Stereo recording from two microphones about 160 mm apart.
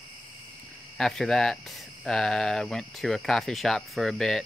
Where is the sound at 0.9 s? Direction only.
5° left (ahead or behind).